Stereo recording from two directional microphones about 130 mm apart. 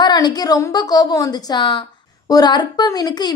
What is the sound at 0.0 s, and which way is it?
A woman's voice, 35° left (ahead or behind).